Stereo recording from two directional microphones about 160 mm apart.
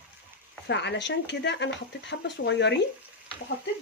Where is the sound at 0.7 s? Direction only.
90° left.